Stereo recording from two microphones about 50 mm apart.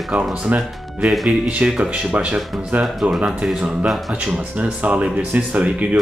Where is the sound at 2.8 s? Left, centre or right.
Centre.